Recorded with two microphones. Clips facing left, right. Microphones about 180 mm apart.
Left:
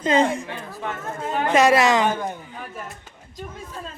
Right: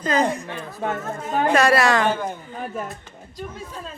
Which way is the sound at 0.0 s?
25° left (ahead or behind).